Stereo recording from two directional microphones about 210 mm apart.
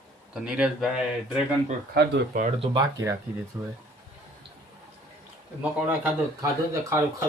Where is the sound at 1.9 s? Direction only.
55° right (ahead or behind).